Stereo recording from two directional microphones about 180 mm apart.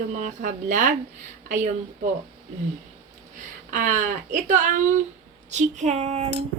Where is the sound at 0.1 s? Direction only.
45° right (ahead or behind).